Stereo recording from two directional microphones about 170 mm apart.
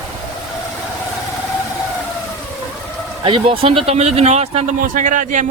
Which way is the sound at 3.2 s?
30° right (ahead or behind).